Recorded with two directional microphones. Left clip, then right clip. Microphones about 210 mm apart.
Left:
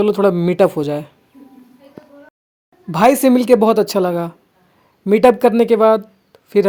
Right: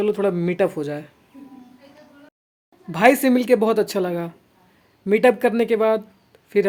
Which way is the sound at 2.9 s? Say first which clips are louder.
Left 4 dB; 30° left (ahead or behind).